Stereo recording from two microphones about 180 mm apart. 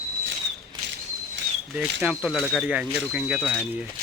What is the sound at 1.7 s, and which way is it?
Speech, 5° right (ahead or behind).